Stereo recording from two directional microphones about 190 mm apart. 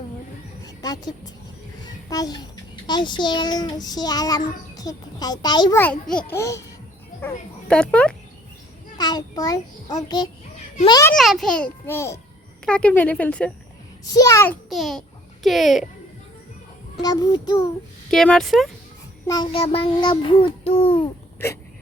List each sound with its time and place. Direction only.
0.6 s a child's voice: 20° left (ahead or behind)
5.8 s speech: 5° left (ahead or behind)
9.0 s a child's voice: 20° left (ahead or behind)
11.1 s a child's voice: centre (ahead or behind)
14.0 s speech: 20° left (ahead or behind)
14.7 s a child's voice: centre (ahead or behind)
17.0 s a child's voice: 20° left (ahead or behind)
18.1 s a child's voice: centre (ahead or behind)
19.3 s a child's voice: 25° left (ahead or behind)